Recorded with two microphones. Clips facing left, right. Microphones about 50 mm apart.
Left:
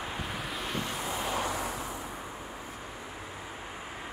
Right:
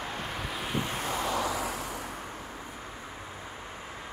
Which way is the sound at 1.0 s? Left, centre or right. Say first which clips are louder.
Right 2 dB; right.